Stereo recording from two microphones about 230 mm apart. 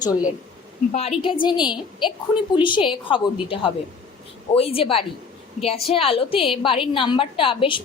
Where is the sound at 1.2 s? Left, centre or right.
Left.